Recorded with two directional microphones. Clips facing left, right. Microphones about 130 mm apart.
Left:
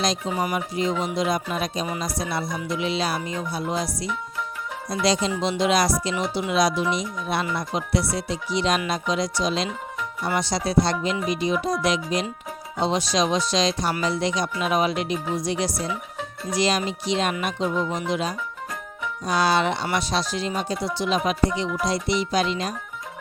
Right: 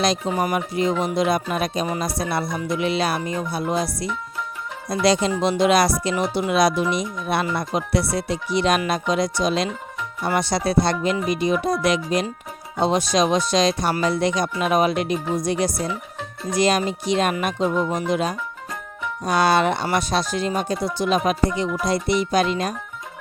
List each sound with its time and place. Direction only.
0.0 s speech: 60° right (ahead or behind)
4.9 s speech: 60° right (ahead or behind)